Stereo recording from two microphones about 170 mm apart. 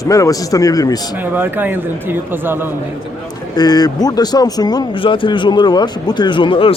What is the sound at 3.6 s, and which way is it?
Speech, 25° left (ahead or behind).